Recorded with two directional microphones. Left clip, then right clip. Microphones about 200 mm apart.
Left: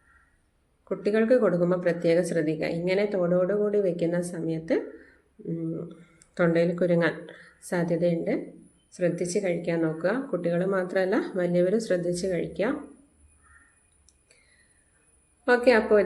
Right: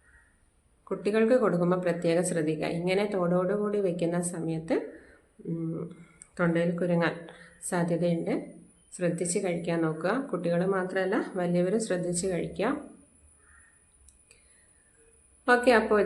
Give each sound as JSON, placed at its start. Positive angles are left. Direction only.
{"t": 0.9, "sound": "a woman's voice", "side_deg": 5}
{"t": 6.1, "sound": "speech", "side_deg": 15}
{"t": 7.3, "sound": "a woman's voice", "side_deg": 10}
{"t": 15.4, "sound": "a woman's voice", "side_deg": 5}